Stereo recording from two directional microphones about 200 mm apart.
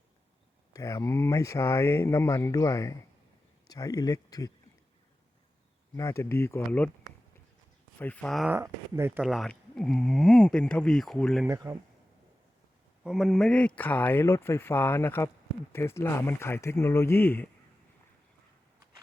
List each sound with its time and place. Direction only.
0.7 s speech: 15° left (ahead or behind)
6.0 s speech: 15° left (ahead or behind)
7.9 s speech: 10° left (ahead or behind)
8.5 s speech: 10° right (ahead or behind)
11.4 s speech: 15° right (ahead or behind)
13.1 s speech: centre (ahead or behind)